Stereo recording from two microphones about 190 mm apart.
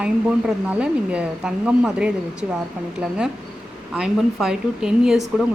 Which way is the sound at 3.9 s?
5° right (ahead or behind).